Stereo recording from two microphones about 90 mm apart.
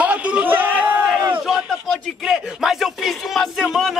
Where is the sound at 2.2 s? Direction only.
5° right (ahead or behind).